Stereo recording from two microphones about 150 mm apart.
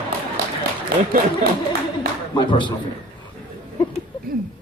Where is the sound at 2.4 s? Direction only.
30° left (ahead or behind).